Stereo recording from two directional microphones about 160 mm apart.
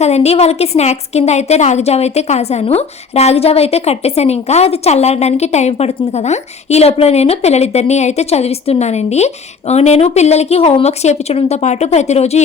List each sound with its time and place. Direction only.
0.0 s a woman's voice: 40° left (ahead or behind)